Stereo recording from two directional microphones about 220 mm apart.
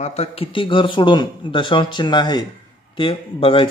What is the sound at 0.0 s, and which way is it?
A man's voice, 30° left (ahead or behind).